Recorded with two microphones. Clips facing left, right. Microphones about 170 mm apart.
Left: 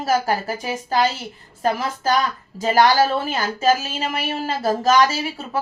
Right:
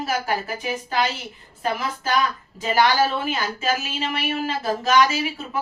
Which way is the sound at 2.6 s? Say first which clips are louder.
Left 3 dB; 40° left (ahead or behind).